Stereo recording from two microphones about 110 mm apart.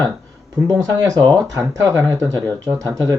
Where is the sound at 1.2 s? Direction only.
35° right (ahead or behind).